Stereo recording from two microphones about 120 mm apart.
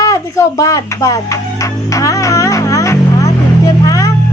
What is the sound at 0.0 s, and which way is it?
Music, 30° left (ahead or behind).